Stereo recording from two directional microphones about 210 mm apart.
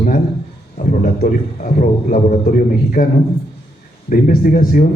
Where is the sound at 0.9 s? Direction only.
40° left (ahead or behind).